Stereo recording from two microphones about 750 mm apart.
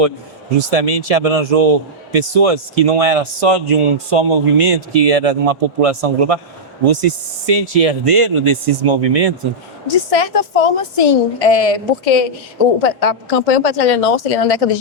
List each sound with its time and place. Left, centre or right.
0.6 s speech: right
9.8 s speech: left
11.0 s speech: left